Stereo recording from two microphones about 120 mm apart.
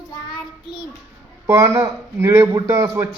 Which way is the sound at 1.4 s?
25° right (ahead or behind).